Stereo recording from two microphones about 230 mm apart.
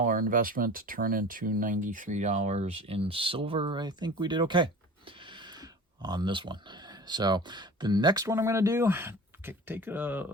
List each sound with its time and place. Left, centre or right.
0.0 s speech: right; by 10.3 s centre